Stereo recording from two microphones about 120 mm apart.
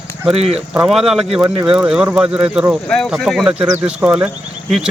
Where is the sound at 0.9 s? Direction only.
Centre (ahead or behind).